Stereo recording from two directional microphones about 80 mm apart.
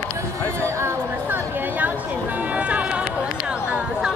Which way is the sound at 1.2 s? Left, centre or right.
Right.